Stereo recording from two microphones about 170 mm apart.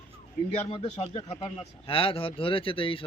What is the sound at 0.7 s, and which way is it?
Speech, 35° left (ahead or behind).